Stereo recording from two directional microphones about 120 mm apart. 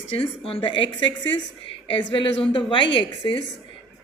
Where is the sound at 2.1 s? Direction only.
50° left (ahead or behind).